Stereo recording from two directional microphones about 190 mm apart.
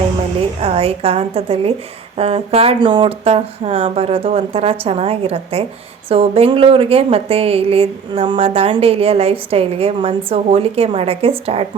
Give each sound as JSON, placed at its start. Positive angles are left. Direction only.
{"t": 0.6, "sound": "speech", "side_deg": -30}